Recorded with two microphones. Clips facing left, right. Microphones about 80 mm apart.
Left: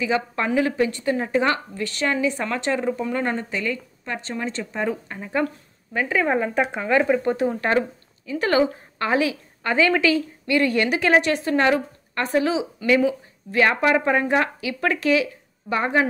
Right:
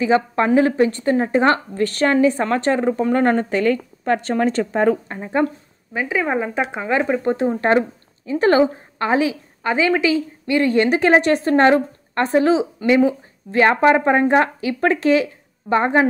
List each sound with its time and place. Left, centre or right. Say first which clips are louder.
0.0 s speech: right 6 dB; right
5.0 s speech: right 4 dB; right
5.9 s speech: right 1 dB; centre
7.3 s a woman's voice: right 4 dB; right